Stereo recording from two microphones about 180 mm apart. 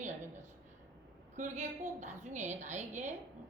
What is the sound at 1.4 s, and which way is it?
A woman's voice, 40° right (ahead or behind).